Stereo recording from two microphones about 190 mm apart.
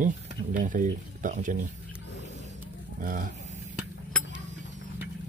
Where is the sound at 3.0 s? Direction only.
45° right (ahead or behind).